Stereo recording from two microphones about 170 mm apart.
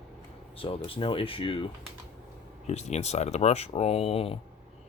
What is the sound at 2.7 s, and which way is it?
Speech, 40° left (ahead or behind).